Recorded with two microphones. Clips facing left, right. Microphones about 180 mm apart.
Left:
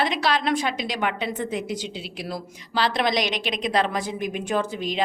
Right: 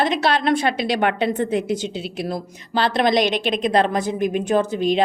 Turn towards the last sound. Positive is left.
turn(degrees=-55)  # may be behind; listen again after turning